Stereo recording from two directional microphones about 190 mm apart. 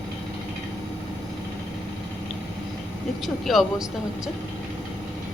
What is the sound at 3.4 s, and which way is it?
Speech, centre (ahead or behind).